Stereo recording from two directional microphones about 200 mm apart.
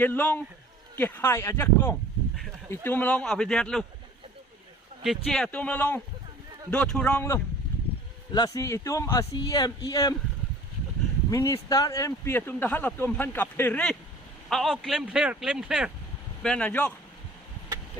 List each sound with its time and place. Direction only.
0.0 s speech: 10° left (ahead or behind)
5.0 s speech: 5° left (ahead or behind); by 10.2 s 20° left (ahead or behind)
11.3 s speech: 15° left (ahead or behind)